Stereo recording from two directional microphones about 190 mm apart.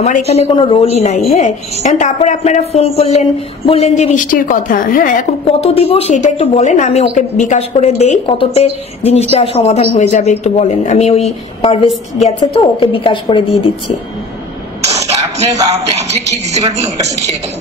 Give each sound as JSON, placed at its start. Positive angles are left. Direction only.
{"t": 0.0, "sound": "a woman's voice", "side_deg": 35}
{"t": 5.5, "sound": "a woman's voice", "side_deg": 30}
{"t": 12.9, "sound": "a woman's voice", "side_deg": 25}
{"t": 14.9, "sound": "speech", "side_deg": -35}